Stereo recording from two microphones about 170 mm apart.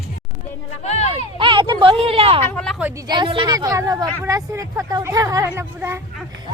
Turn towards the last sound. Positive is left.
turn(degrees=-15)  # may be behind; listen again after turning